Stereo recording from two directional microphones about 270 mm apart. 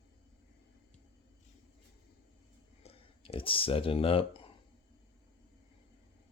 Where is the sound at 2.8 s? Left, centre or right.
Left.